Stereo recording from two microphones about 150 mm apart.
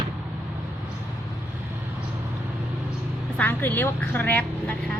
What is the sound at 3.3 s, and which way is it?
Speech, 10° left (ahead or behind).